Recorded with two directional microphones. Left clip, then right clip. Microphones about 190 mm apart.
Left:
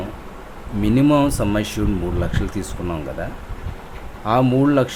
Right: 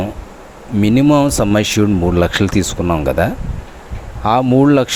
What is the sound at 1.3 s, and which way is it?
Speech, 35° right (ahead or behind).